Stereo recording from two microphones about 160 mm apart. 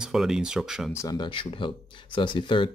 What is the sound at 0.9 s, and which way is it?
Speech, 20° left (ahead or behind).